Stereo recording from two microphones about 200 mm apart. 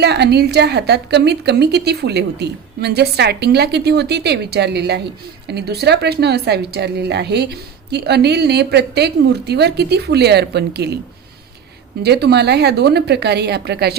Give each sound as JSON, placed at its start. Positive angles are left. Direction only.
{"t": 0.0, "sound": "a woman's voice", "side_deg": -55}
{"t": 12.0, "sound": "a woman's voice", "side_deg": -55}